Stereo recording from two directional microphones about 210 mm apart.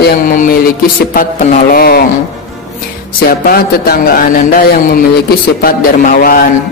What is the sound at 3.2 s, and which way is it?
A man's voice, 45° left (ahead or behind).